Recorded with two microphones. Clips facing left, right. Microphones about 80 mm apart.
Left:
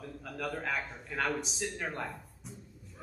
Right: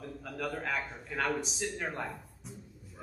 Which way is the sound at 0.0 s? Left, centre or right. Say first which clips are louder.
Right 1 dB; centre.